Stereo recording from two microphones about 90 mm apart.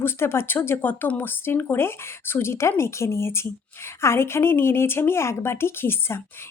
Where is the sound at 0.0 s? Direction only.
30° left (ahead or behind).